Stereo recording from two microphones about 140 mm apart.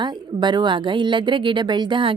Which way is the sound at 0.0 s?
30° right (ahead or behind).